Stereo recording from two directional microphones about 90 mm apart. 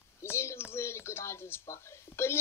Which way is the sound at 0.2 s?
30° left (ahead or behind).